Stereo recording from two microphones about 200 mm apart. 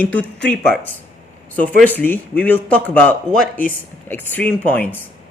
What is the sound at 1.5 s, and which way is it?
A man's voice, 5° left (ahead or behind).